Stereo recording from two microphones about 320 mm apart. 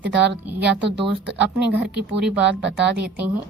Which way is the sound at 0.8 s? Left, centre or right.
Right.